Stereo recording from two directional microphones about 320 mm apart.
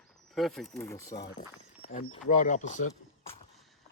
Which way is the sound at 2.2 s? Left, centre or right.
Left.